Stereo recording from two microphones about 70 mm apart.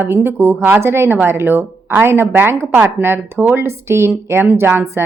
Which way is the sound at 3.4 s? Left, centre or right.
Right.